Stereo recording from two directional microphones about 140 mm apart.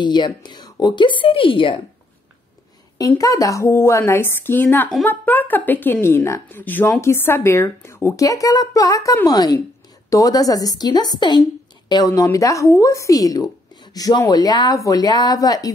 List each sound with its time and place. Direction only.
0.0 s speech: 30° left (ahead or behind)
3.1 s speech: 25° left (ahead or behind)